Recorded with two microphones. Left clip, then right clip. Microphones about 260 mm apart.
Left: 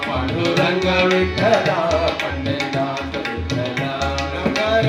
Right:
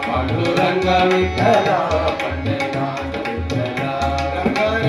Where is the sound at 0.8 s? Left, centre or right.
Left.